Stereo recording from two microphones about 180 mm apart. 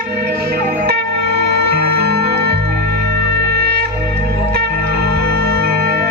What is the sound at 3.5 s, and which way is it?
Music, 60° right (ahead or behind).